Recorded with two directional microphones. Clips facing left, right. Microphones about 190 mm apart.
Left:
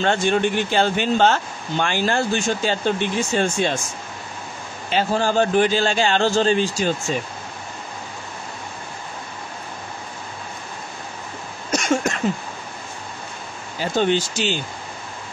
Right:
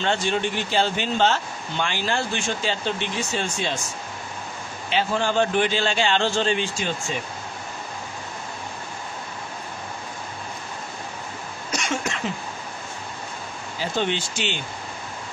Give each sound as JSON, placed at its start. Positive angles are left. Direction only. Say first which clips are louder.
{"t": 0.0, "sound": "speech", "louder": "left 5 dB", "side_deg": 50}
{"t": 4.8, "sound": "a man's voice", "louder": "left 3 dB", "side_deg": 40}
{"t": 11.7, "sound": "a sound", "louder": "left 7 dB", "side_deg": 45}
{"t": 13.9, "sound": "a man's voice", "louder": "left 7 dB", "side_deg": 40}